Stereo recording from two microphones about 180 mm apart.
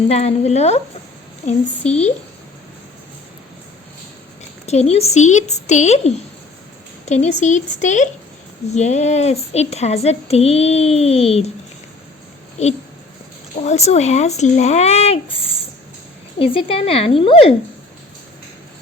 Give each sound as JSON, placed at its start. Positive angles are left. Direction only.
{"t": 0.1, "sound": "speech", "side_deg": 35}
{"t": 1.9, "sound": "speech", "side_deg": 35}
{"t": 4.6, "sound": "speech", "side_deg": 35}
{"t": 12.6, "sound": "speech", "side_deg": 40}